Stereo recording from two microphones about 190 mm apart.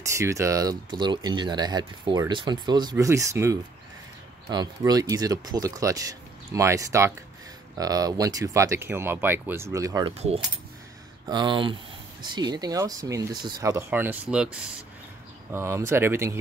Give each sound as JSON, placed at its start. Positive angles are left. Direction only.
{"t": 0.1, "sound": "speech", "side_deg": -15}
{"t": 10.1, "sound": "keys jangling", "side_deg": -35}
{"t": 11.2, "sound": "speech", "side_deg": -25}
{"t": 15.5, "sound": "speech", "side_deg": -15}